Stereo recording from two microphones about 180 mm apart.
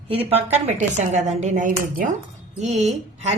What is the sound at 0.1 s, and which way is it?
A woman's voice, 35° right (ahead or behind).